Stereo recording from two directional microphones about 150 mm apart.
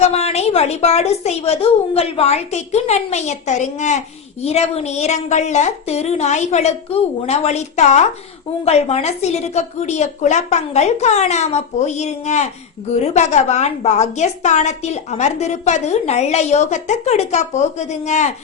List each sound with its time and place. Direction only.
0.0 s a woman's voice: 45° left (ahead or behind)